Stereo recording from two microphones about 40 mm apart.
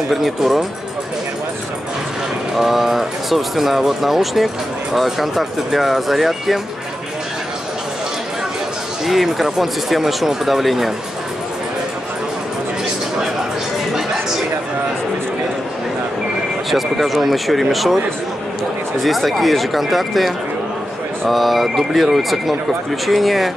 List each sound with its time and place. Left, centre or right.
0.1 s speech: centre
2.5 s speech: centre
9.0 s speech: centre
16.7 s speech: centre
19.0 s speech: centre